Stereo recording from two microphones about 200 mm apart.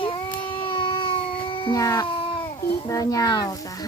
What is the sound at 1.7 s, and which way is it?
Speech, 15° left (ahead or behind).